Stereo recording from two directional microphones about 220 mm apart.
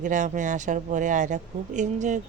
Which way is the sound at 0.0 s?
35° right (ahead or behind).